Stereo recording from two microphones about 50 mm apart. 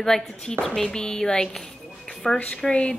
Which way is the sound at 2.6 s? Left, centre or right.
Left.